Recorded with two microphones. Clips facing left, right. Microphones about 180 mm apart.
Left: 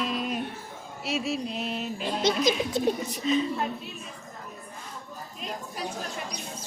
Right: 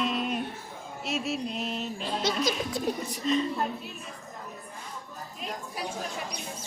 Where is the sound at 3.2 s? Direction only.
Centre (ahead or behind).